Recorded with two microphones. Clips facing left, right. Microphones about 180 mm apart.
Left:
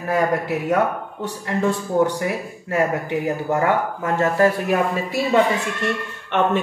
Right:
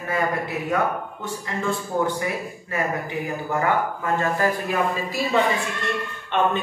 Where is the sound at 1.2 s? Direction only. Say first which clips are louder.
Left 7 dB; 75° left (ahead or behind).